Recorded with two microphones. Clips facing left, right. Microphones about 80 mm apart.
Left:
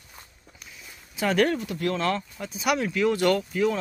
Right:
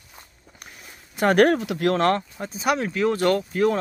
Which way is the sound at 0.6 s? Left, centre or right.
Right.